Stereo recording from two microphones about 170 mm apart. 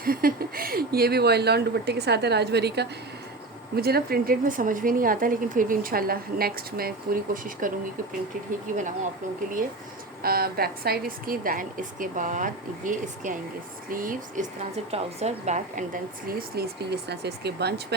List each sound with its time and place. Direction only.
0.0 s speech: 60° right (ahead or behind); by 2.8 s 75° right (ahead or behind)
3.8 s speech: 65° right (ahead or behind)
8.7 s speech: 45° right (ahead or behind)
10.2 s speech: 65° right (ahead or behind)
14.6 s speech: 40° right (ahead or behind); by 17.7 s 75° right (ahead or behind)